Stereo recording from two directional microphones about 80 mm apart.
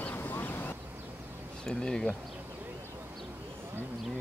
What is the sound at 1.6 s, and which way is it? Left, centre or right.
Bee, centre.